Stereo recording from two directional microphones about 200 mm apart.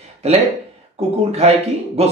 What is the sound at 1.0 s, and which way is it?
A man's voice, 30° right (ahead or behind).